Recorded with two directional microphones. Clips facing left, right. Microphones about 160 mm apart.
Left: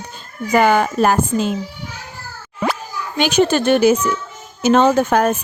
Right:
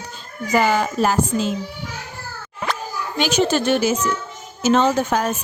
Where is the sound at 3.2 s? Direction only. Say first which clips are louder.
Left 4 dB; 55° left (ahead or behind).